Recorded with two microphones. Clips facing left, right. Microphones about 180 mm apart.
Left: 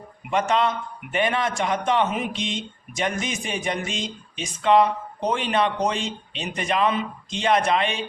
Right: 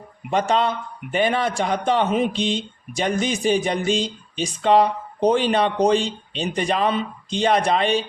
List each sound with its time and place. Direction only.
0.3 s a man's voice: 35° right (ahead or behind)